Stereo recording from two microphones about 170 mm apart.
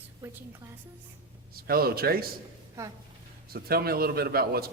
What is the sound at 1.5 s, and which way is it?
Speech, 65° right (ahead or behind).